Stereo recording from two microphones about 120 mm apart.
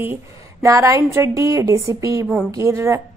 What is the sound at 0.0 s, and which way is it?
A woman's voice, 20° right (ahead or behind).